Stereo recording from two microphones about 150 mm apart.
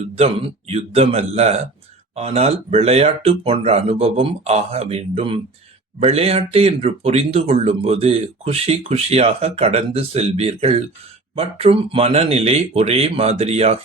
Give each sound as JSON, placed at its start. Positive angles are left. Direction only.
{"t": 0.2, "sound": "speech", "side_deg": -40}